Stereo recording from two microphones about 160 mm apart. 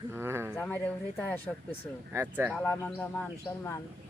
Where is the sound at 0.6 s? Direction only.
10° left (ahead or behind).